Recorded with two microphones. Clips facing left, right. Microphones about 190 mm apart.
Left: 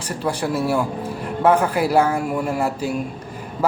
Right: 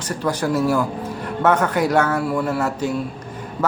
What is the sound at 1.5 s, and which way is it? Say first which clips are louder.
Speech: left 1 dB; 30° left (ahead or behind).